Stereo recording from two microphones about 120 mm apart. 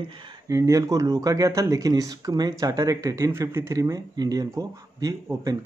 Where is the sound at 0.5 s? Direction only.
30° right (ahead or behind).